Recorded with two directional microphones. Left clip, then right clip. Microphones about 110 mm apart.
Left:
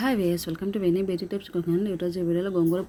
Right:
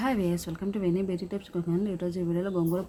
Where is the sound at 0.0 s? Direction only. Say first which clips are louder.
Left 4 dB; 25° left (ahead or behind).